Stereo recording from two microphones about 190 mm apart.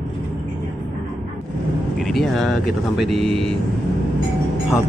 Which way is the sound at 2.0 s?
Centre (ahead or behind).